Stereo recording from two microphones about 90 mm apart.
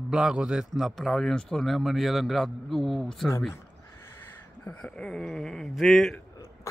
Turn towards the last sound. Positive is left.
turn(degrees=0)  # may be behind; listen again after turning